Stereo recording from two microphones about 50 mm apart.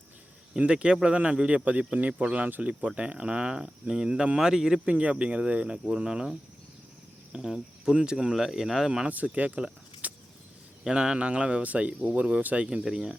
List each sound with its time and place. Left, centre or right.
0.6 s speech: centre
4.9 s speech: right
7.3 s speech: centre
9.0 s speech: right
10.0 s vehicle: right
10.8 s speech: centre
12.7 s speech: centre